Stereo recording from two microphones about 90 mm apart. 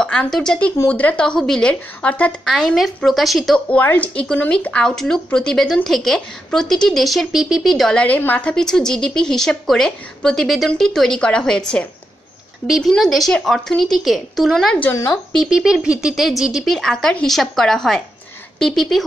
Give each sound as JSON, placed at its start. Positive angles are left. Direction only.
{"t": 0.0, "sound": "speech", "side_deg": 10}
{"t": 2.4, "sound": "speech", "side_deg": 0}
{"t": 3.6, "sound": "speech", "side_deg": 20}
{"t": 8.0, "sound": "speech", "side_deg": 20}
{"t": 8.5, "sound": "speech", "side_deg": 5}
{"t": 12.6, "sound": "speech", "side_deg": -5}